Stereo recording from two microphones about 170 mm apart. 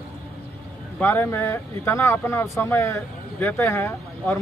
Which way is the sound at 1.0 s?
10° left (ahead or behind).